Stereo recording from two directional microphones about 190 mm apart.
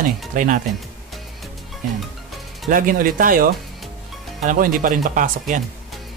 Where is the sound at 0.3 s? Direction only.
45° right (ahead or behind).